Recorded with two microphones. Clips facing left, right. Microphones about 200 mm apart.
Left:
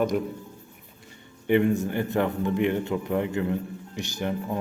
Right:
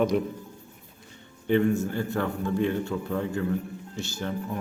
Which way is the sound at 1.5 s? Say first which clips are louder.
Left 1 dB; 15° left (ahead or behind).